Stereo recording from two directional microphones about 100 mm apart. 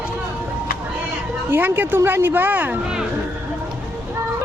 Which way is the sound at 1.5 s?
20° right (ahead or behind).